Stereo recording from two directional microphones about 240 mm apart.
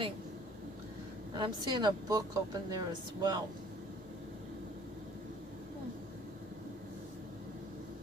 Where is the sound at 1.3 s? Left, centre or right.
Centre.